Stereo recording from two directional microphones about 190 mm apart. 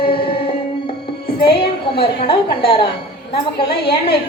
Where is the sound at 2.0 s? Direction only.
30° left (ahead or behind).